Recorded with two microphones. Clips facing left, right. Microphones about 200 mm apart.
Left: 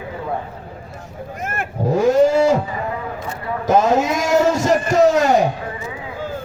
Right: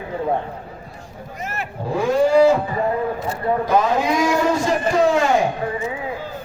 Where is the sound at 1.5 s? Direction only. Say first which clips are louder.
Left 6 dB; 45° left (ahead or behind).